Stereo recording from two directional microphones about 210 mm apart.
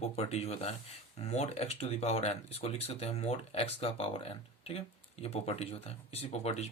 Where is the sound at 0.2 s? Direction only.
30° left (ahead or behind).